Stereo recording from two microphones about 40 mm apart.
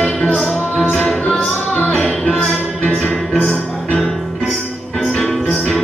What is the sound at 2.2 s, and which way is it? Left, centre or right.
Music, centre.